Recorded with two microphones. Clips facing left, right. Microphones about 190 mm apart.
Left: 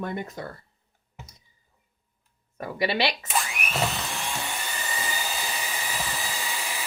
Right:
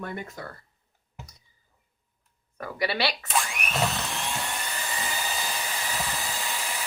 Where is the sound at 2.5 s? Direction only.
25° left (ahead or behind).